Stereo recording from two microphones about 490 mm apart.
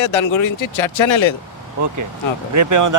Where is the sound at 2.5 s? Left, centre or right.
Right.